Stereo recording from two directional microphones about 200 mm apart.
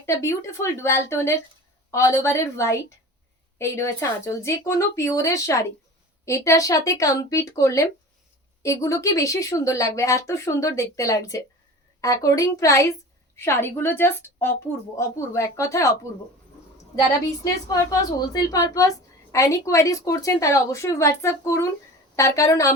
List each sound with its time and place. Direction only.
0.0 s a woman's voice: 15° left (ahead or behind)
18.3 s a woman's voice: 15° left (ahead or behind)